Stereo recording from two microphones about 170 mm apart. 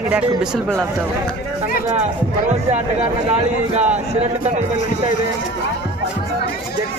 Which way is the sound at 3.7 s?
45° right (ahead or behind).